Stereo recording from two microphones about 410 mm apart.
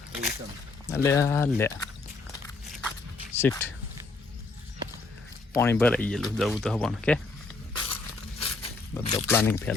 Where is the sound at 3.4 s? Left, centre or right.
Centre.